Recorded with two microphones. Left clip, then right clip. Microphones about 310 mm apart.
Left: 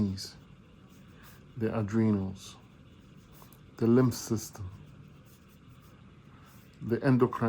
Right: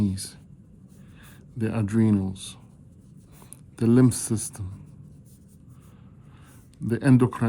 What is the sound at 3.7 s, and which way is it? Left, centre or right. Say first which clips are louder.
Speech: right 5 dB; right.